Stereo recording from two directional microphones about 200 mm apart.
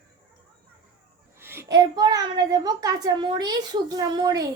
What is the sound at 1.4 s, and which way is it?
A child's voice, 10° right (ahead or behind).